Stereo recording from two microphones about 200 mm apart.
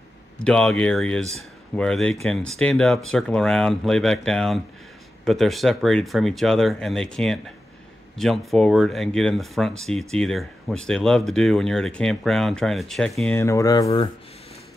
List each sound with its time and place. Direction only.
0.4 s speech: 5° left (ahead or behind)
13.8 s speech: 30° left (ahead or behind)